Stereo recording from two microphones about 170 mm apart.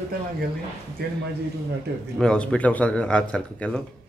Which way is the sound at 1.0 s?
65° right (ahead or behind).